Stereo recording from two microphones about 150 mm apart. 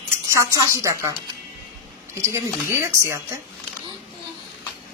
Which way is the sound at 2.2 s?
20° right (ahead or behind).